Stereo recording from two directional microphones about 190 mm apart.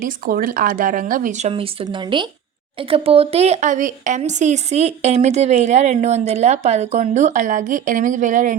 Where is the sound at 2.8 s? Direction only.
30° right (ahead or behind).